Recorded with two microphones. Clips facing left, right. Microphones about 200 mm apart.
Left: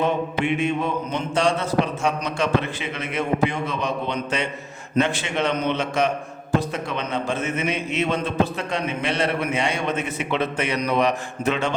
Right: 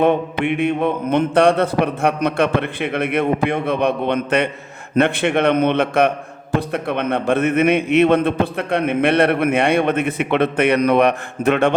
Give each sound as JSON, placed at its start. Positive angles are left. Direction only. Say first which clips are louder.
{"t": 0.0, "sound": "a man's voice", "louder": "right 6 dB", "side_deg": -60}